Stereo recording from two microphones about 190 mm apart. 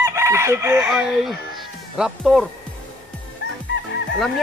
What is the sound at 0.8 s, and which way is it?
Speech, 5° right (ahead or behind).